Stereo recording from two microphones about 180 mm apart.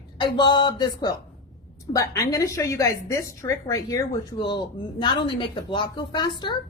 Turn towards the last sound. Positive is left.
turn(degrees=25)  # may be behind; listen again after turning